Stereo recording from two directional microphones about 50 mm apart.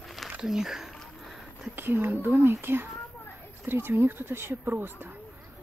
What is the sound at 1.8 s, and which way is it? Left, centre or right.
Speech, right.